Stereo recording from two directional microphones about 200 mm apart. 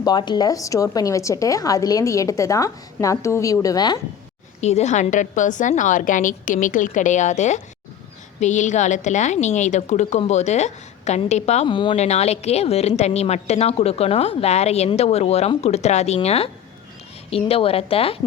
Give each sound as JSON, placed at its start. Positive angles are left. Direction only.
{"t": 0.0, "sound": "a woman's voice", "side_deg": 20}
{"t": 4.6, "sound": "a woman's voice", "side_deg": 35}